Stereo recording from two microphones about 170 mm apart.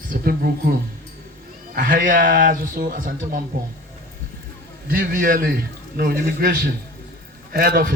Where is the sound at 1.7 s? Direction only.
55° right (ahead or behind).